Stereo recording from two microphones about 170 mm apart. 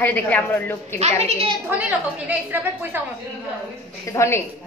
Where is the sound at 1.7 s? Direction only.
10° right (ahead or behind).